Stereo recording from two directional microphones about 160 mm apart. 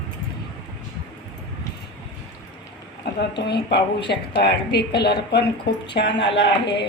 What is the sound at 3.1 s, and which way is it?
A woman's voice, 90° left.